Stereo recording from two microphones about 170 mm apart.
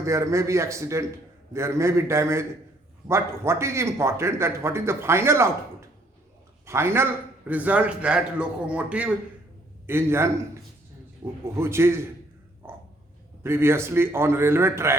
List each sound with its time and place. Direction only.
0.0 s a man's voice: 15° right (ahead or behind)
6.7 s a man's voice: 15° right (ahead or behind)
13.4 s a man's voice: 15° right (ahead or behind)